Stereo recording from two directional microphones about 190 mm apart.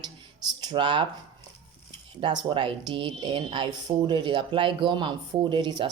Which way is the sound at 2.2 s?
25° right (ahead or behind).